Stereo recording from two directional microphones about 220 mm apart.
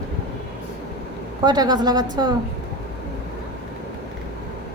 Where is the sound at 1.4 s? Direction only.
20° right (ahead or behind).